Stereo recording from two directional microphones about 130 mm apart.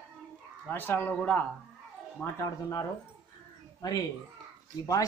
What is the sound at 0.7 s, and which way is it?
Speech, 15° left (ahead or behind).